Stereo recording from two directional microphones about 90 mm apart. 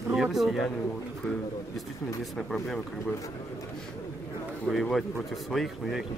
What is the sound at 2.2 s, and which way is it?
Speech, 5° left (ahead or behind).